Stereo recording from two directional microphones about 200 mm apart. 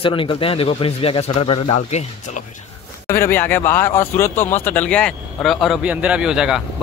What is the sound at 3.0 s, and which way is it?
Speech, 15° left (ahead or behind).